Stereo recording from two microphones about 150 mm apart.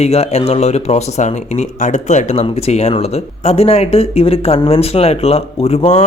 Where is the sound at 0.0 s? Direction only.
45° left (ahead or behind).